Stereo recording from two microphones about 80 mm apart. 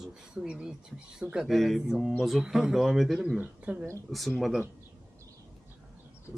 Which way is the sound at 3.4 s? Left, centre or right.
Right.